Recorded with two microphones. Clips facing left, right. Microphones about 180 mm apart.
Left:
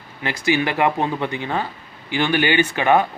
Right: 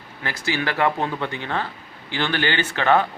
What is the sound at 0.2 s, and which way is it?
A man's voice, 20° left (ahead or behind).